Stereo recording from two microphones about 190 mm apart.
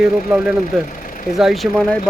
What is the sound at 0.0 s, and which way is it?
Speech, 5° right (ahead or behind).